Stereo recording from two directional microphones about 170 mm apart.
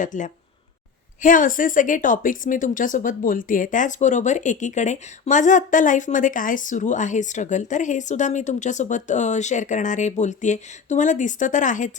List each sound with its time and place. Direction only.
0.0 s speech: 50° left (ahead or behind)